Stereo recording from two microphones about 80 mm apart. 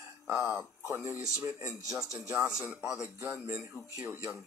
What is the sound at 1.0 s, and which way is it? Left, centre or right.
Speech, left.